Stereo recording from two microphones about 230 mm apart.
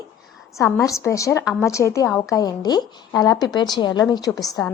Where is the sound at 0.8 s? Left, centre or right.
Centre.